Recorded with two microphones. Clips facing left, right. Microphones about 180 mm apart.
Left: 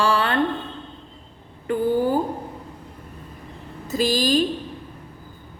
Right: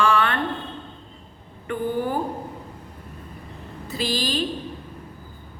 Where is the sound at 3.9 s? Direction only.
45° left (ahead or behind).